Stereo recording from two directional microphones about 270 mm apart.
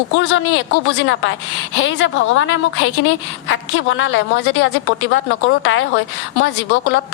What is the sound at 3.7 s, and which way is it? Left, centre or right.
A woman's voice, left.